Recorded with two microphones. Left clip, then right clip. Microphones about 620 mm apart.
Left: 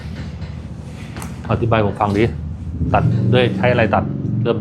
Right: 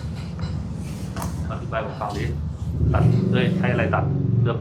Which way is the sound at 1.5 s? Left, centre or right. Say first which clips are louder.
Left 12 dB; left.